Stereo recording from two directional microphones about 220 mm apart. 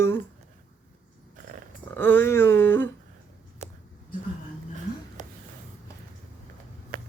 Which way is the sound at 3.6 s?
30° right (ahead or behind).